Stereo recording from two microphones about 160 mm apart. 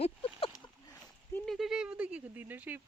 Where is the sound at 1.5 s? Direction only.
Centre (ahead or behind).